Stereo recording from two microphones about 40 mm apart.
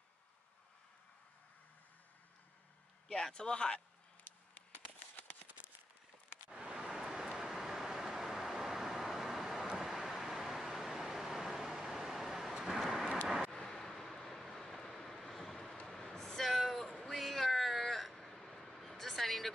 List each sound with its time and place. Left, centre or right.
3.1 s speech: centre
6.5 s a sound: centre
7.2 s vehicle: centre
7.7 s vehicle: centre
13.5 s vehicle: centre
15.9 s a sound: centre
16.5 s cat: centre